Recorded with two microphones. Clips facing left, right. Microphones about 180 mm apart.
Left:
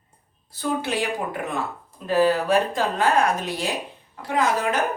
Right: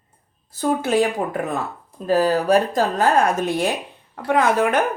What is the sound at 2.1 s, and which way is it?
Speech, 40° right (ahead or behind).